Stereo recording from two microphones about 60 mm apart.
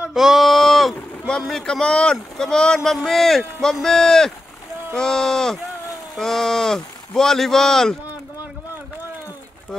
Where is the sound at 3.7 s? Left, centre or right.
Centre.